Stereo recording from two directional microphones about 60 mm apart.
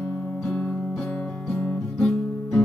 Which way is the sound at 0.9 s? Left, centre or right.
Left.